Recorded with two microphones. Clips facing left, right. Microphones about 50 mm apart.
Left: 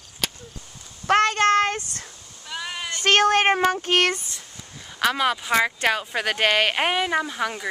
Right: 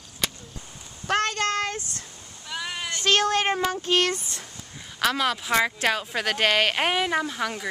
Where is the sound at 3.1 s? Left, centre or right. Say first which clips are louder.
Left 4 dB; left.